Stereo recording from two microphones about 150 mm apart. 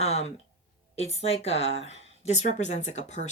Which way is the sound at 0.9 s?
45° left (ahead or behind).